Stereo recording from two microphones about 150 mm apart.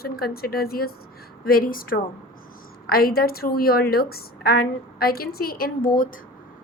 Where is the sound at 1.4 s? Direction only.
75° left (ahead or behind).